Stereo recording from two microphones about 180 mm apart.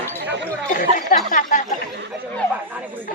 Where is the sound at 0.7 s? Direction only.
45° left (ahead or behind).